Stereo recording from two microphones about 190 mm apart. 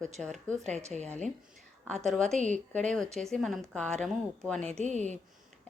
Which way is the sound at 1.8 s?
Centre (ahead or behind).